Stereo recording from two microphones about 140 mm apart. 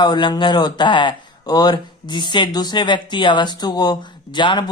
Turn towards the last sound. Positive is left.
turn(degrees=35)  # may be behind; listen again after turning